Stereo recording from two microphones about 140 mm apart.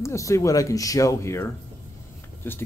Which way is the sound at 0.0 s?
20° left (ahead or behind).